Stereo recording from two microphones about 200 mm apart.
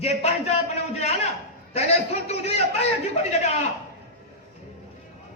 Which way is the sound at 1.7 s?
30° left (ahead or behind).